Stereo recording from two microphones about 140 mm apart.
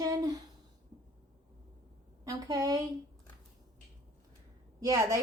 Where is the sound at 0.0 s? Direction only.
25° right (ahead or behind).